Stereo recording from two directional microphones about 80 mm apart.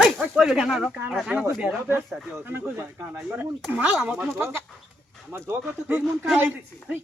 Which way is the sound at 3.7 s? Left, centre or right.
Centre.